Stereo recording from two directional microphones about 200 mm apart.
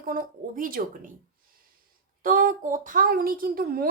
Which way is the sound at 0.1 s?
45° right (ahead or behind).